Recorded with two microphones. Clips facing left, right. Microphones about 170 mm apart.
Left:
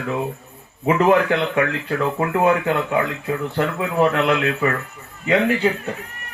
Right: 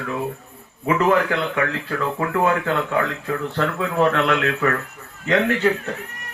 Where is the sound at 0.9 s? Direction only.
20° left (ahead or behind).